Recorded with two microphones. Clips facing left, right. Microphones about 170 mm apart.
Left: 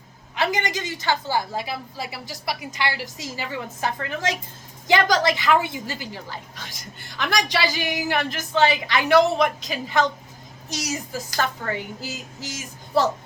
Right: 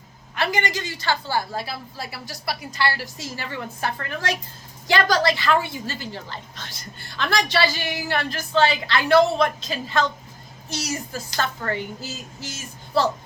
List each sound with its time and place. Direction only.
0.3 s a woman's voice: 20° left (ahead or behind)